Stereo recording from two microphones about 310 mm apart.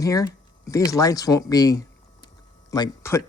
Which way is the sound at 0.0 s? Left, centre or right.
Centre.